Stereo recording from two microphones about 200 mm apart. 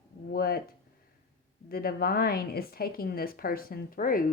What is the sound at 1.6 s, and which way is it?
A woman's voice, 50° left (ahead or behind).